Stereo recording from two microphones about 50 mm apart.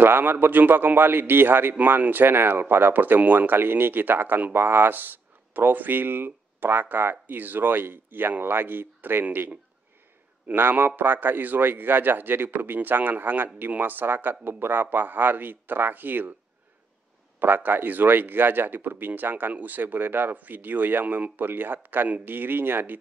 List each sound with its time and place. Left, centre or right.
0.0 s speech: right
10.5 s speech: right
17.4 s speech: right